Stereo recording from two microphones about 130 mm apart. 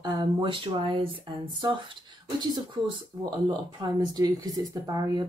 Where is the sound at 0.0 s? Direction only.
35° right (ahead or behind).